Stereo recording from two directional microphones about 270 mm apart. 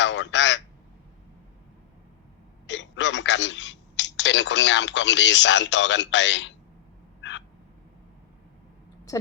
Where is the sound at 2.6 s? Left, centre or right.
Left.